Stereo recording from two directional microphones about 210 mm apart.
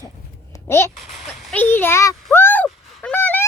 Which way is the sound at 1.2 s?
Centre (ahead or behind).